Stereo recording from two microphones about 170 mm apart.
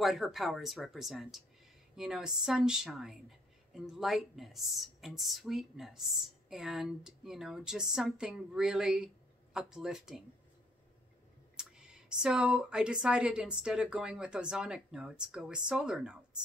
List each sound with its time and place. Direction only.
0.0 s speech: centre (ahead or behind)
11.5 s speech: 5° right (ahead or behind)